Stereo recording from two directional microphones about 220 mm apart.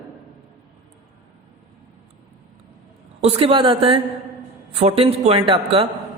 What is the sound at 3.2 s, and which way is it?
Speech, 25° right (ahead or behind).